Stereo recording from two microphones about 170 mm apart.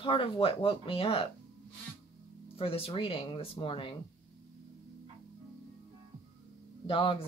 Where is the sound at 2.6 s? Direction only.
35° left (ahead or behind).